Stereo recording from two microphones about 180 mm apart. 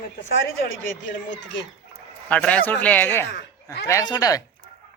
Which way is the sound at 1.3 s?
85° left.